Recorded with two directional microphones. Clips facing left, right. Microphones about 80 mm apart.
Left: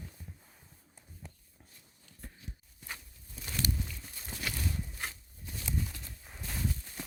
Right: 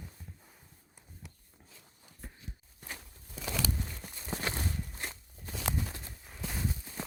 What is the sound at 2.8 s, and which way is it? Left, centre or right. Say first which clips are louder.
Walk: even; right.